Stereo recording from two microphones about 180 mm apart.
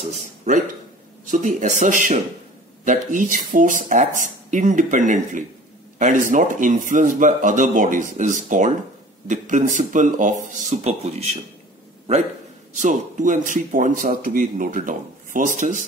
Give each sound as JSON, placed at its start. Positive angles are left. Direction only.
{"t": 0.0, "sound": "a sound", "side_deg": -40}
{"t": 1.2, "sound": "a man's voice", "side_deg": -45}
{"t": 12.7, "sound": "a man's voice", "side_deg": -40}